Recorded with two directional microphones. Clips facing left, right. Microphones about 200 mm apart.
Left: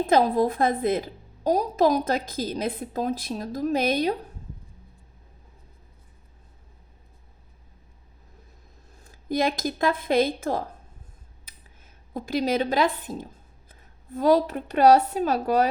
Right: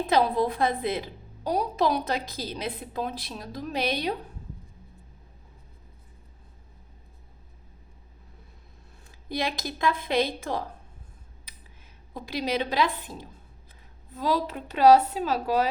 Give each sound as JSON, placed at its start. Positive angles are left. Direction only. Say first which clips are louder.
{"t": 0.1, "sound": "a woman's voice", "louder": "left 3 dB", "side_deg": 45}
{"t": 9.0, "sound": "a woman's voice", "louder": "left 6 dB", "side_deg": 45}
{"t": 12.1, "sound": "a woman's voice", "louder": "left 4 dB", "side_deg": 50}